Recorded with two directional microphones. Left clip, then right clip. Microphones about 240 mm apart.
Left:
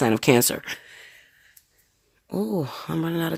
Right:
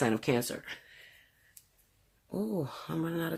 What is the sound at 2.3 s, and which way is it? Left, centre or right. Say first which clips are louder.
Speech: left 8 dB; left.